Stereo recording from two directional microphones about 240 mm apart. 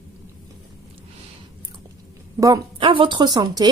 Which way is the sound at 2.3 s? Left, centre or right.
Centre.